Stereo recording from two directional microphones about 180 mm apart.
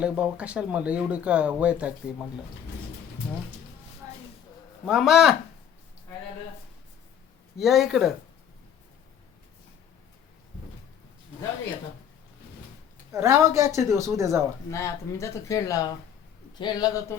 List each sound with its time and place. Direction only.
0.0 s speech: 5° right (ahead or behind)
4.9 s speech: centre (ahead or behind)
7.6 s speech: centre (ahead or behind)
13.1 s speech: 15° right (ahead or behind)
14.7 s a man's voice: 15° left (ahead or behind)